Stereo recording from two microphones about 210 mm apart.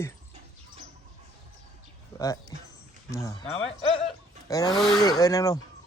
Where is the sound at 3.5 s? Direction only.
30° left (ahead or behind).